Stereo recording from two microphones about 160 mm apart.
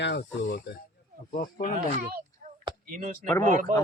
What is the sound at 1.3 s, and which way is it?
Speech, 60° left (ahead or behind).